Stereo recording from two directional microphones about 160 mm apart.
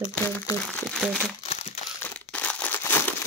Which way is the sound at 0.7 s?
Centre (ahead or behind).